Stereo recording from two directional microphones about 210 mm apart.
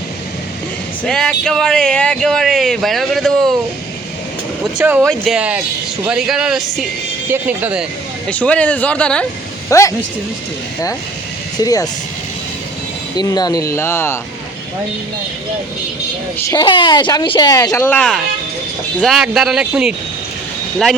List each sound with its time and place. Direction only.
1.0 s speech: 5° left (ahead or behind)
4.6 s speech: 5° right (ahead or behind)
8.3 s speech: 5° left (ahead or behind)
11.6 s speech: 15° left (ahead or behind)
13.1 s speech: 20° left (ahead or behind)
16.5 s speech: 20° left (ahead or behind); by 19.9 s centre (ahead or behind)